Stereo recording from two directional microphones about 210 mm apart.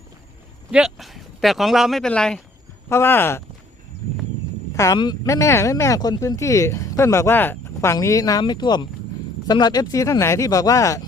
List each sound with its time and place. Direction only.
0.7 s speech: 5° right (ahead or behind)
4.7 s speech: 15° left (ahead or behind)